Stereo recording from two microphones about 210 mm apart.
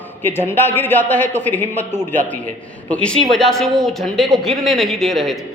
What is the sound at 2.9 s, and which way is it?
A man's voice, 5° left (ahead or behind).